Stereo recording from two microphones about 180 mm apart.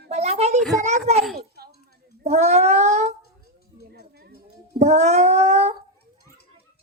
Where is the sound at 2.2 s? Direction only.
35° right (ahead or behind).